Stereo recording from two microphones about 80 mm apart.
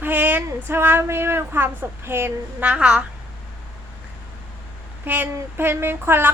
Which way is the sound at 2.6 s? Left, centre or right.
Centre.